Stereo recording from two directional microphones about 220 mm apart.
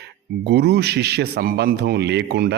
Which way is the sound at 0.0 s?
50° right (ahead or behind).